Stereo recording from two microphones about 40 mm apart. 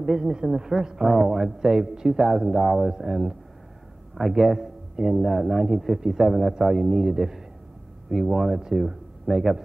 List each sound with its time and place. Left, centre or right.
0.2 s a woman's voice: centre